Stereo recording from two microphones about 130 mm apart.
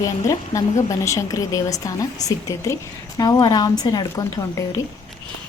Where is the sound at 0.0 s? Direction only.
25° left (ahead or behind).